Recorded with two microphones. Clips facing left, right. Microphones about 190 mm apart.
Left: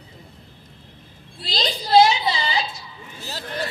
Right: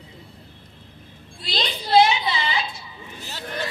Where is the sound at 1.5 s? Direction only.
35° left (ahead or behind).